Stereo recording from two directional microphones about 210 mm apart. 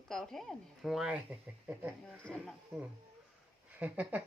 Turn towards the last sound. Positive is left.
turn(degrees=-5)  # may be behind; listen again after turning